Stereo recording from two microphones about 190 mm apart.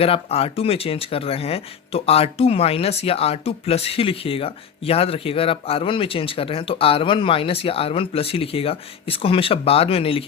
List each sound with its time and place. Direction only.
0.0 s speech: 30° left (ahead or behind)